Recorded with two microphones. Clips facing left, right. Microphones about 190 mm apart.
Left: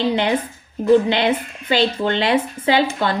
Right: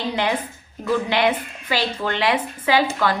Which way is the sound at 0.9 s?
25° left (ahead or behind).